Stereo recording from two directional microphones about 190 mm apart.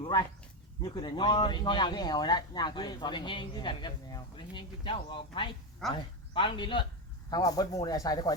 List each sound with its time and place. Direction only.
0.0 s speech: 20° left (ahead or behind)